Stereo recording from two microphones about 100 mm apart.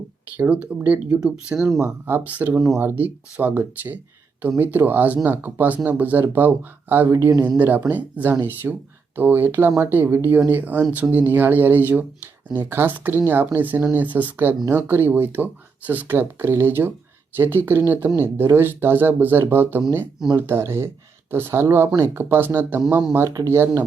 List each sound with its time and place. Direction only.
0.3 s speech: 15° right (ahead or behind)
1.8 s speech: 20° right (ahead or behind)